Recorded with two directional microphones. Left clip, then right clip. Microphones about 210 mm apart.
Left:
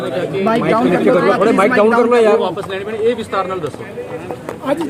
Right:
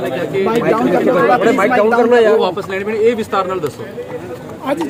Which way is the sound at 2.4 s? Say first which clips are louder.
Right 2 dB; 45° right (ahead or behind).